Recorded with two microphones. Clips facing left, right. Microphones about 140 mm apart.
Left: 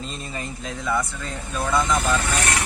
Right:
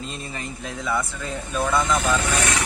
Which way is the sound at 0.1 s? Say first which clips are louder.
Left 1 dB; centre (ahead or behind).